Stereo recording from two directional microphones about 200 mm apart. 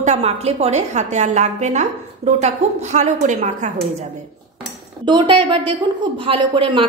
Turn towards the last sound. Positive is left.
turn(degrees=-25)  # may be behind; listen again after turning